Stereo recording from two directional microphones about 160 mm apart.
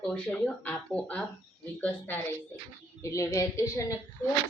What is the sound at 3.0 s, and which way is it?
Speech, 20° left (ahead or behind).